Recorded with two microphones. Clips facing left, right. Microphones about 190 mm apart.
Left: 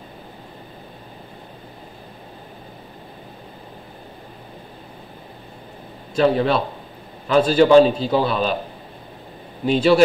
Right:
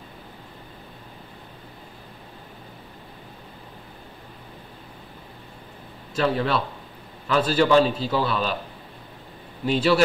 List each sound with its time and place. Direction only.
6.1 s a man's voice: 25° left (ahead or behind)
9.7 s a man's voice: 20° left (ahead or behind)